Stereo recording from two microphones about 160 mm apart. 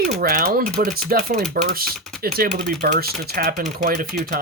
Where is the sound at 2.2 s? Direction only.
65° right (ahead or behind).